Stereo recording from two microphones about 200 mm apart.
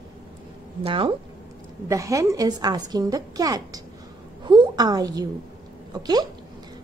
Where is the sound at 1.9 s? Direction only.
15° right (ahead or behind).